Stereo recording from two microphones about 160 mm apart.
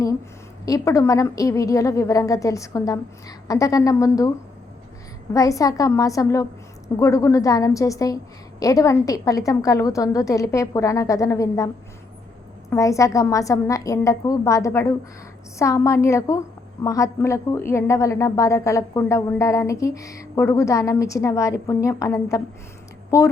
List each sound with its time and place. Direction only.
0.6 s a woman's voice: 20° left (ahead or behind)
5.3 s a woman's voice: 20° left (ahead or behind)
12.7 s a woman's voice: 20° left (ahead or behind)